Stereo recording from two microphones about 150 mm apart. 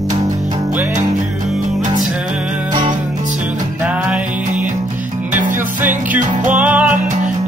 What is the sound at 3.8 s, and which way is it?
Music, 10° right (ahead or behind).